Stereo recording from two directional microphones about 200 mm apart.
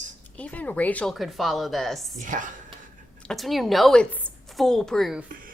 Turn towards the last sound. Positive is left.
turn(degrees=0)  # may be behind; listen again after turning